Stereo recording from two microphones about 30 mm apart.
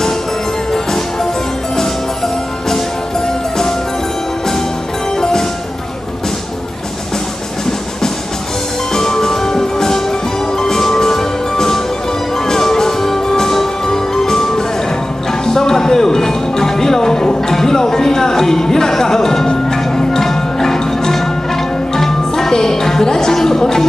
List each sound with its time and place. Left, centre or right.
8.9 s music: centre